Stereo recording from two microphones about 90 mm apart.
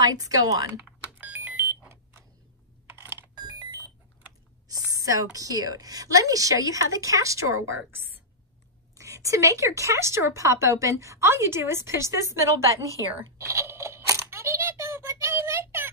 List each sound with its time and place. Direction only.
0.0 s speech: 40° right (ahead or behind)
1.2 s alarm: 20° right (ahead or behind)
3.0 s a sound: 25° right (ahead or behind)
4.6 s a woman's voice: 40° right (ahead or behind)
13.4 s crunch: 30° right (ahead or behind)